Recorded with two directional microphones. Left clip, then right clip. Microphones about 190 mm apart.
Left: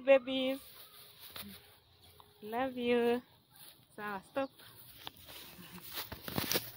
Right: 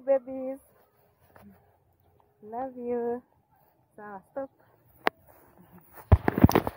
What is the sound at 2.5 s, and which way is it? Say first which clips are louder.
Speech: even; 15° left (ahead or behind).